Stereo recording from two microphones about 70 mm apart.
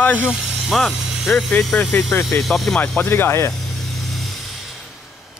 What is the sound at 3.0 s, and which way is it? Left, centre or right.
Speech, left.